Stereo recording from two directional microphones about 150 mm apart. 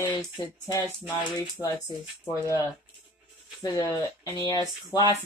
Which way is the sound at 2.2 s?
20° left (ahead or behind).